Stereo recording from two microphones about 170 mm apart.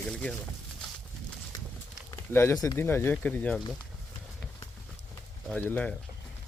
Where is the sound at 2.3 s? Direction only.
15° left (ahead or behind).